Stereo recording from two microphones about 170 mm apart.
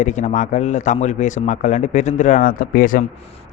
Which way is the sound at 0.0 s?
45° left (ahead or behind).